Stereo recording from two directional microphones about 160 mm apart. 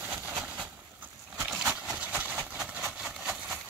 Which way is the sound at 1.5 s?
5° right (ahead or behind).